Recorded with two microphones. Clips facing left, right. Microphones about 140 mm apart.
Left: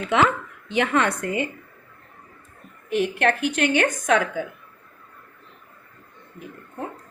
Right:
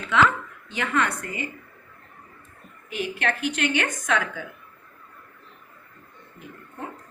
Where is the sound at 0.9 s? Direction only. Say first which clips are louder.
Left 4 dB; 25° left (ahead or behind).